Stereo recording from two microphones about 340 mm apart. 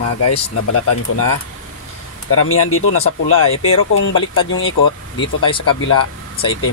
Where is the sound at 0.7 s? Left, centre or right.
Left.